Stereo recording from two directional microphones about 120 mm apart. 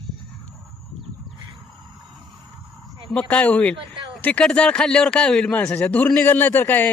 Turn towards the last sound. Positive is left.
turn(degrees=15)  # may be behind; listen again after turning